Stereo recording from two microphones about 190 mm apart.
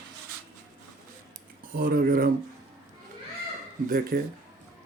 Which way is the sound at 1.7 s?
50° right (ahead or behind).